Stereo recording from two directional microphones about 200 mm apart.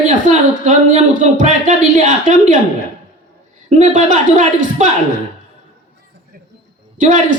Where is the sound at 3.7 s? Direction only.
40° right (ahead or behind).